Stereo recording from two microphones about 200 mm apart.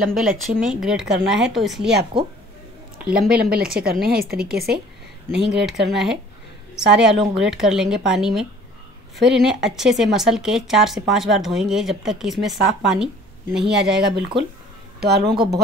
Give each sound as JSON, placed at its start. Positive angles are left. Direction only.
{"t": 0.1, "sound": "speech", "side_deg": 0}
{"t": 3.3, "sound": "speech", "side_deg": -50}
{"t": 5.4, "sound": "speech", "side_deg": 0}
{"t": 15.0, "sound": "speech", "side_deg": -55}
{"t": 15.3, "sound": "speech", "side_deg": -25}